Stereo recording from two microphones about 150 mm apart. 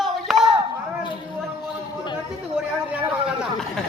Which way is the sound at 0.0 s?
Centre (ahead or behind).